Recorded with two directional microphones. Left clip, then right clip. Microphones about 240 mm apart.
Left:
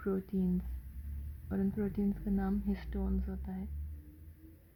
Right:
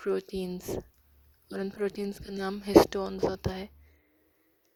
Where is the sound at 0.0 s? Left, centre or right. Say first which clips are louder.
Right 6 dB; right.